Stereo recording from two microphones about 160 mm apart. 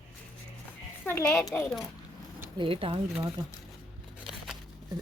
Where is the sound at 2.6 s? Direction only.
35° right (ahead or behind).